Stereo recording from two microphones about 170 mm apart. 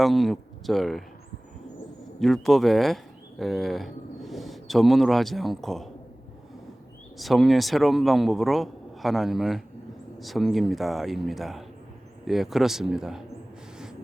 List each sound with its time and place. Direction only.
0.0 s a man's voice: centre (ahead or behind)
2.1 s speech: centre (ahead or behind)
7.2 s a man's voice: centre (ahead or behind)